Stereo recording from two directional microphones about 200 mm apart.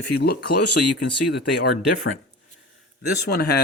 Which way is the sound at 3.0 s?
50° left (ahead or behind).